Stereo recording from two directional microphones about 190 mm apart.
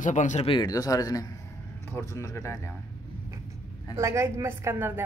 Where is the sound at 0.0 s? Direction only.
40° left (ahead or behind).